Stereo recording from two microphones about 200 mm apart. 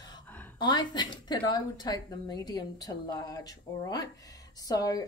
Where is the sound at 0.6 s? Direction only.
20° left (ahead or behind).